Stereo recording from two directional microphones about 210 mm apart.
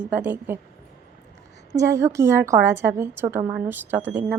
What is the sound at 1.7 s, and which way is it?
A woman's voice, 15° right (ahead or behind).